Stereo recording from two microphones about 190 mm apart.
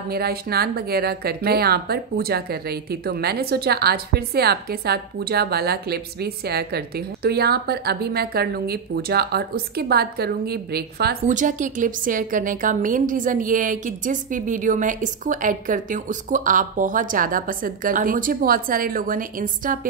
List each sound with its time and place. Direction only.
0.1 s speech: 55° right (ahead or behind)
11.2 s a woman's voice: 40° right (ahead or behind)